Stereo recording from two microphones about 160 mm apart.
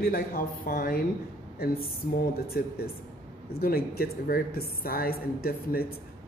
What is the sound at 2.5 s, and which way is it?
A woman's voice, 75° left (ahead or behind).